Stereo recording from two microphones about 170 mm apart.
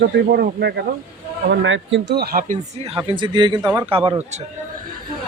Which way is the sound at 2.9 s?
30° right (ahead or behind).